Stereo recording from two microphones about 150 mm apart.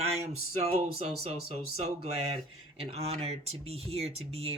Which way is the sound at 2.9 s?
40° right (ahead or behind).